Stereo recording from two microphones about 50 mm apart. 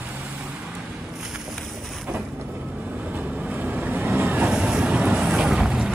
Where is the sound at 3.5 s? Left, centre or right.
Right.